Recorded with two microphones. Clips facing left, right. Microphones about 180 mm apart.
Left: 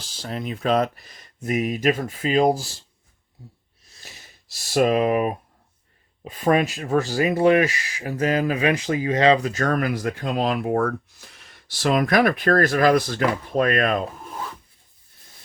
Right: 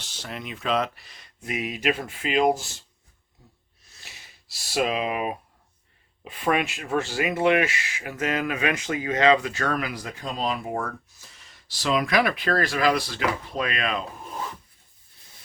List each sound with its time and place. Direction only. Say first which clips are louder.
0.0 s speech: left 6 dB; 35° left (ahead or behind)
3.8 s snort: left 3 dB; 40° left (ahead or behind)
4.7 s speech: left 7 dB; 45° left (ahead or behind)